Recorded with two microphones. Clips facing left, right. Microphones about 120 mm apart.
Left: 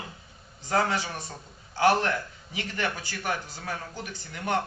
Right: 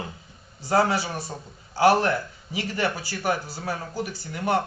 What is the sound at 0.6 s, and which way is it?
Speech, 30° right (ahead or behind).